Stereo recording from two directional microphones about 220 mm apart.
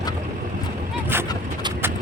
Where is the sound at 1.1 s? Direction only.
10° right (ahead or behind).